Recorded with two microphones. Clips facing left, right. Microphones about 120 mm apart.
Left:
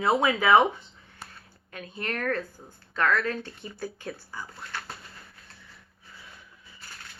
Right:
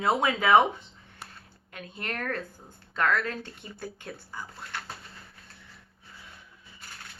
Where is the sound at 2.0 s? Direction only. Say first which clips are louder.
Left 4 dB; 20° right (ahead or behind).